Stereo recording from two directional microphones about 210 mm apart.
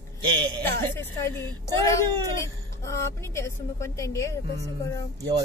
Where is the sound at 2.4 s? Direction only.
15° left (ahead or behind).